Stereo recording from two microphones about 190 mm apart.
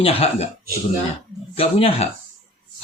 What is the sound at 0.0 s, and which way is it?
Speech, 30° left (ahead or behind).